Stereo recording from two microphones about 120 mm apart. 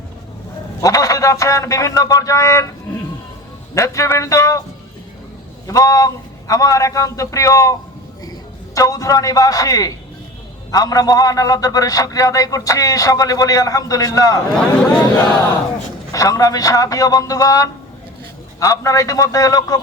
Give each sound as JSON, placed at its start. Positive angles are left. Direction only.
{"t": 0.8, "sound": "a man's voice", "side_deg": 30}
{"t": 3.8, "sound": "a man's voice", "side_deg": 25}
{"t": 5.6, "sound": "a man's voice", "side_deg": 25}
{"t": 14.5, "sound": "speech", "side_deg": 15}
{"t": 16.1, "sound": "a man's voice", "side_deg": 25}